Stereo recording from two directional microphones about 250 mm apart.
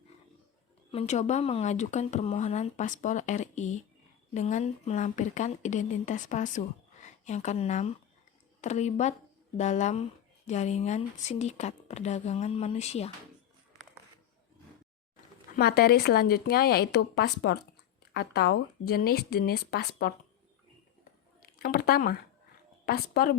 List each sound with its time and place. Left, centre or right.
0.9 s a woman's voice: left
15.5 s speech: left
21.4 s speech: left